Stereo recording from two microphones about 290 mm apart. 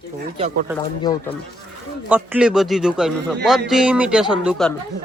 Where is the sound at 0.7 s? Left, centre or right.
Centre.